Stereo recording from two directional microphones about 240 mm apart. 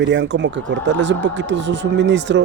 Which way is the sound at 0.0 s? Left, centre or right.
Right.